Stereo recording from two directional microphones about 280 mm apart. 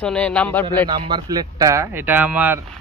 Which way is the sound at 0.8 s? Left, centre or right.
Centre.